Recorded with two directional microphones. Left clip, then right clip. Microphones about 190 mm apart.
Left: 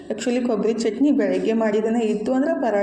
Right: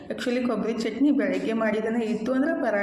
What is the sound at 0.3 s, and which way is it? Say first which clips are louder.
A woman's voice: left 5 dB; 15° left (ahead or behind).